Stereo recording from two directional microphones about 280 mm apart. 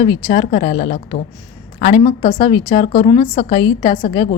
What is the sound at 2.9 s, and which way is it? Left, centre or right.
Speech, left.